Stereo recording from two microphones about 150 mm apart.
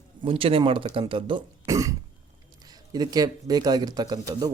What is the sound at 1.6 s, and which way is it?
Cough, 20° right (ahead or behind).